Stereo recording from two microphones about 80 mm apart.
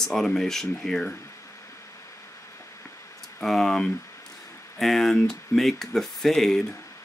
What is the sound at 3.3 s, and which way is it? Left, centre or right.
Speech, centre.